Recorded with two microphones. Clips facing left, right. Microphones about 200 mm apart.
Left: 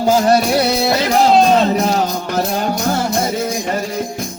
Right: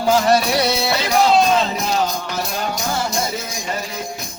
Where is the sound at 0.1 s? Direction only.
45° left (ahead or behind).